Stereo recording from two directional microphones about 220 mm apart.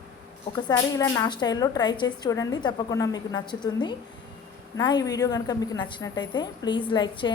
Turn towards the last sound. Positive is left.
turn(degrees=20)  # may be behind; listen again after turning